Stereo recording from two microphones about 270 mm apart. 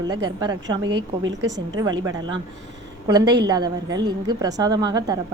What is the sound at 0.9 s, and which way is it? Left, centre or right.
Speech, right.